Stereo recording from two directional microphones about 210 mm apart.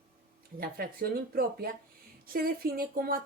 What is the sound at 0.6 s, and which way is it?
Speech, 45° right (ahead or behind).